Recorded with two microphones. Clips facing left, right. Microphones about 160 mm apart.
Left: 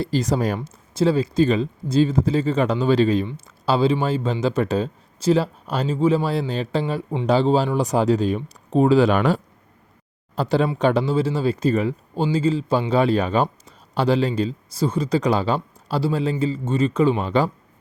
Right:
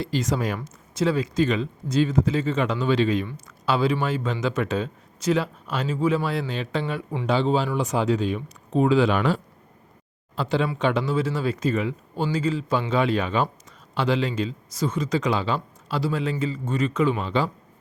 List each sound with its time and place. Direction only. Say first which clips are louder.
0.0 s a man's voice: left 4 dB; 35° left (ahead or behind)
3.2 s a man's voice: left 3 dB; 25° left (ahead or behind)
17.2 s speech: left 4 dB; 45° left (ahead or behind)